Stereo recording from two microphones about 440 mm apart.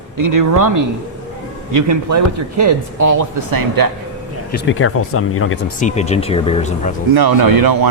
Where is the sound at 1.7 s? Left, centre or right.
Right.